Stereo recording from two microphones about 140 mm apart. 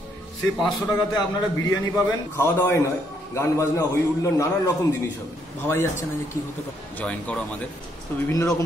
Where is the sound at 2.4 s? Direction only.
20° left (ahead or behind).